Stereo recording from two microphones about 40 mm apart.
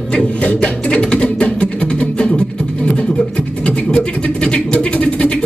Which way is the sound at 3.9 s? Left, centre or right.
Left.